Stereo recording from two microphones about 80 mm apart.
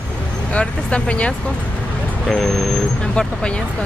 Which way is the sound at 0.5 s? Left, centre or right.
Centre.